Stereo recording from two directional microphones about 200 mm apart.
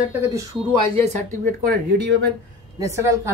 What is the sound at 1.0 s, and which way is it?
Speech, 40° right (ahead or behind).